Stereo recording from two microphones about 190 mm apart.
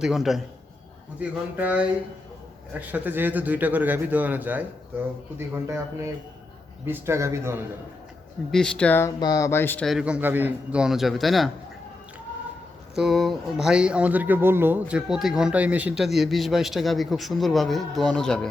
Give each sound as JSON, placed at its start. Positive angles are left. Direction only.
{"t": 0.0, "sound": "a man's voice", "side_deg": 0}
{"t": 8.4, "sound": "speech", "side_deg": 5}
{"t": 13.0, "sound": "speech", "side_deg": 0}